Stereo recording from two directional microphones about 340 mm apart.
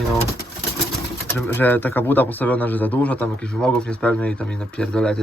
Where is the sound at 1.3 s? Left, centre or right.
Centre.